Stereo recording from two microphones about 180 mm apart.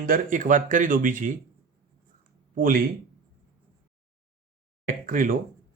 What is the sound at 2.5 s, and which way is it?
Speech, 50° right (ahead or behind).